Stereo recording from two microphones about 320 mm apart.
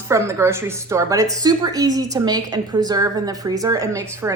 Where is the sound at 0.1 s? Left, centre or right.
Centre.